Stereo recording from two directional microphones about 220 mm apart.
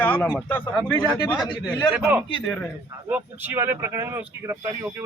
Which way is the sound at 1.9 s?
5° right (ahead or behind).